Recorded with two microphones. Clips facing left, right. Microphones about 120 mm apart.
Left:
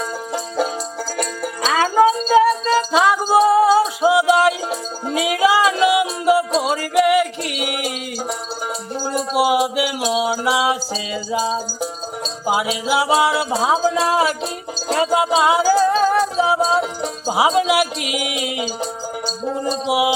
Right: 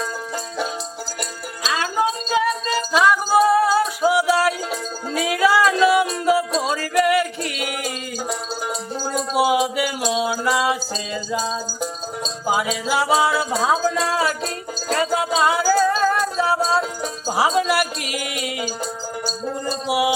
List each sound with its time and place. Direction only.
2.5 s music: 25° left (ahead or behind)
9.0 s a sound: 10° left (ahead or behind)
12.5 s speech: 10° left (ahead or behind)
14.9 s music: 15° left (ahead or behind)